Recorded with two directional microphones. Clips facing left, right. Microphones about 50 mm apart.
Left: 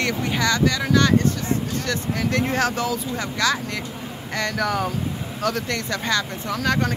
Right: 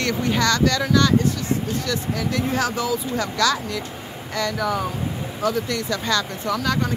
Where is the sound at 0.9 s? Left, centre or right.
Left.